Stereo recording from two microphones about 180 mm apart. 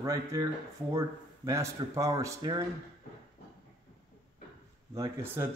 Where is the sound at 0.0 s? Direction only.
20° right (ahead or behind).